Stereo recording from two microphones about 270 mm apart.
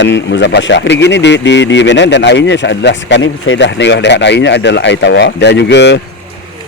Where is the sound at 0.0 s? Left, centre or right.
Left.